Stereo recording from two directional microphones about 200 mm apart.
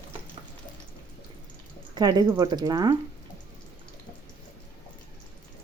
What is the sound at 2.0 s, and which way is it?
Speech, 20° right (ahead or behind).